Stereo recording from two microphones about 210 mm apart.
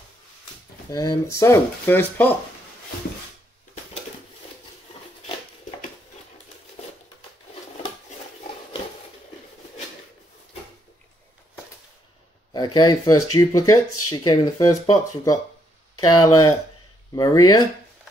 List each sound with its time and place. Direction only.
0.9 s speech: 15° left (ahead or behind)
12.5 s speech: 20° left (ahead or behind)